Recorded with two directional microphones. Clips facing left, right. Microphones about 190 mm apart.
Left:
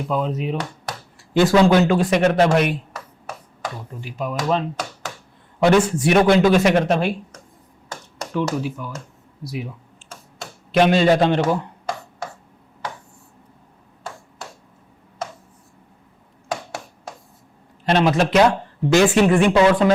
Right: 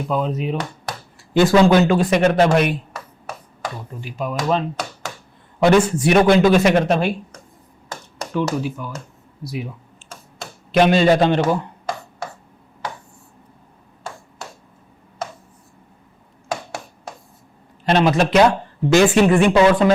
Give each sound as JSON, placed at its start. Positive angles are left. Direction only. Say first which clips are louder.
{"t": 0.1, "sound": "speech", "louder": "right 1 dB", "side_deg": -30}
{"t": 0.5, "sound": "a sound", "louder": "right 1 dB", "side_deg": -15}
{"t": 1.5, "sound": "speech", "louder": "right 1 dB", "side_deg": -20}
{"t": 2.9, "sound": "finger snapping", "louder": "right 1 dB", "side_deg": -15}
{"t": 3.7, "sound": "speech", "louder": "right 1 dB", "side_deg": -25}
{"t": 7.9, "sound": "finger snapping", "louder": "right 1 dB", "side_deg": -25}
{"t": 10.4, "sound": "a sound", "louder": "right 1 dB", "side_deg": -10}
{"t": 14.0, "sound": "finger snapping", "louder": "right 1 dB", "side_deg": -25}
{"t": 16.5, "sound": "a sound", "louder": "right 1 dB", "side_deg": -20}
{"t": 17.8, "sound": "a man's voice", "louder": "right 1 dB", "side_deg": -15}